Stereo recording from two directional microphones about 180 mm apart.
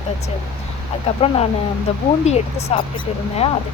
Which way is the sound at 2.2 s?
35° left (ahead or behind).